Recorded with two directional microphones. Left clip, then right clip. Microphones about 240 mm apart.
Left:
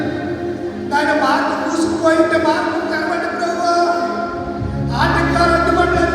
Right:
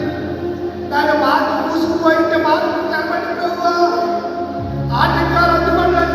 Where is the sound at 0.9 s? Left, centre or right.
Left.